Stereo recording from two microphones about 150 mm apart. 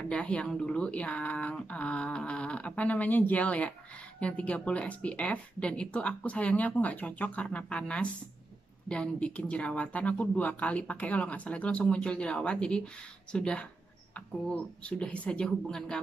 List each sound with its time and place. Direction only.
0.0 s speech: 10° left (ahead or behind)